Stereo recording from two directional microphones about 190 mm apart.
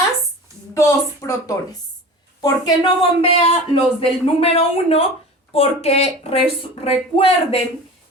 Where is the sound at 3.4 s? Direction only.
30° left (ahead or behind).